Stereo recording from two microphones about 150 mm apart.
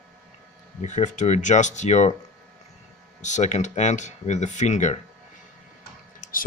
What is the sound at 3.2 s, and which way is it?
Speech, 50° left (ahead or behind).